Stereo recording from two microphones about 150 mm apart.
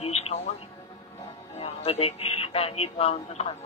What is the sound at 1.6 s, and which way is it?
Speech, 40° left (ahead or behind).